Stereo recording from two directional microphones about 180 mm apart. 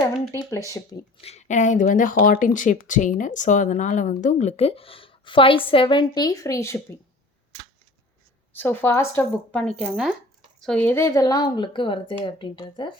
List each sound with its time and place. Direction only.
1.2 s a woman's voice: 35° left (ahead or behind); by 6.7 s 15° left (ahead or behind)
8.5 s a woman's voice: 10° left (ahead or behind); by 12.9 s 25° left (ahead or behind)